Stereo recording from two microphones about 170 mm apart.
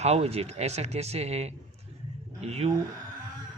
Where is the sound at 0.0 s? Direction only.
40° right (ahead or behind).